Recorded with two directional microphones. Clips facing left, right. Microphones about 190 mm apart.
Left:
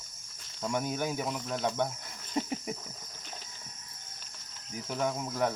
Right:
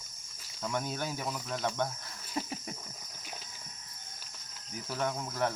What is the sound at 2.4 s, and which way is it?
Cricket, 20° left (ahead or behind).